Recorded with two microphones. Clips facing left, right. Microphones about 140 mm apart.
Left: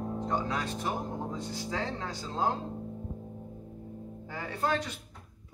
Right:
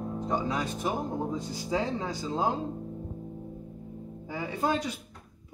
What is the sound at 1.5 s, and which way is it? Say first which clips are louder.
Speech: right 6 dB; 15° right (ahead or behind).